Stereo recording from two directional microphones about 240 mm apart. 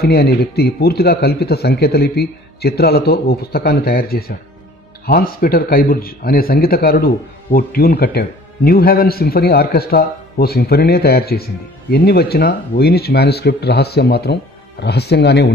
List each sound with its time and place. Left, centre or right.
0.0 s a man's voice: left